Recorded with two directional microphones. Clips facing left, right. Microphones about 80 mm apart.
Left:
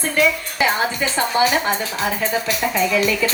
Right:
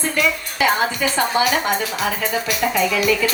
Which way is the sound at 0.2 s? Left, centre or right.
Left.